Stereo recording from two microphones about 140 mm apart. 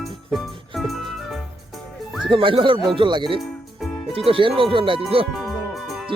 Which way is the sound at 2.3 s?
35° right (ahead or behind).